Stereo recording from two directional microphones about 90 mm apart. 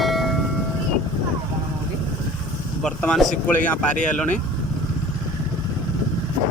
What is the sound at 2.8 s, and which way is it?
Speech, 10° left (ahead or behind).